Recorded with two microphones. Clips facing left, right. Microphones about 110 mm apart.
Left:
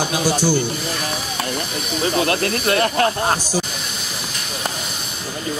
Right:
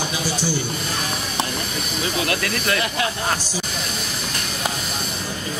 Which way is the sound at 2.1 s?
35° left (ahead or behind).